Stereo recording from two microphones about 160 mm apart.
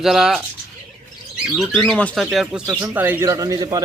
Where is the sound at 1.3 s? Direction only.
5° right (ahead or behind).